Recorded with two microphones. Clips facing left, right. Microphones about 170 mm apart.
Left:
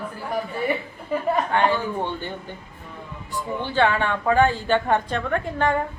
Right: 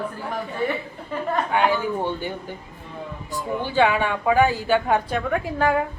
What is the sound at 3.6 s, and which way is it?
A woman's voice, 10° right (ahead or behind).